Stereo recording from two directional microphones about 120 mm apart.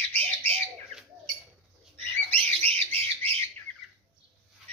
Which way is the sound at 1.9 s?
15° left (ahead or behind).